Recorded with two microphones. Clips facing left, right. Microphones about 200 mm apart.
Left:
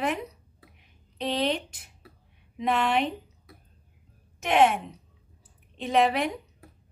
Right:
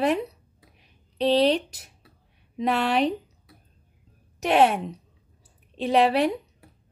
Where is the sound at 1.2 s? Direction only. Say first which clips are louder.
Right 7 dB; 30° right (ahead or behind).